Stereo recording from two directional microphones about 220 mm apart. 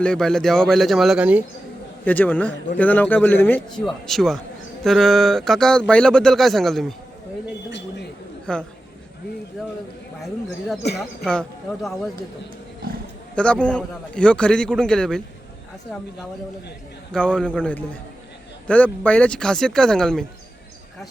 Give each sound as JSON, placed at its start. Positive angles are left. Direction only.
{"t": 0.0, "sound": "speech", "side_deg": 5}
{"t": 2.0, "sound": "a man's voice", "side_deg": 5}
{"t": 7.7, "sound": "a sound", "side_deg": 55}
{"t": 8.5, "sound": "speech", "side_deg": 5}
{"t": 10.9, "sound": "speech", "side_deg": 0}
{"t": 13.3, "sound": "speech", "side_deg": 5}
{"t": 17.1, "sound": "speech", "side_deg": 5}